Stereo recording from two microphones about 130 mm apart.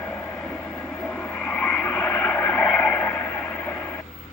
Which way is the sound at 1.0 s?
10° left (ahead or behind).